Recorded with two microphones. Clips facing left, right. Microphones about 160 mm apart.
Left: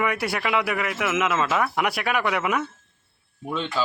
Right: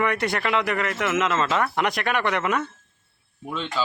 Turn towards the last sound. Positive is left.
turn(degrees=5)  # may be behind; listen again after turning